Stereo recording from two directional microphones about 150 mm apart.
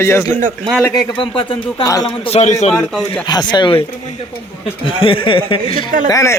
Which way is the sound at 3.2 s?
30° left (ahead or behind).